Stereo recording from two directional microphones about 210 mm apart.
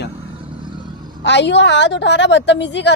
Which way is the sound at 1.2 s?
55° left (ahead or behind).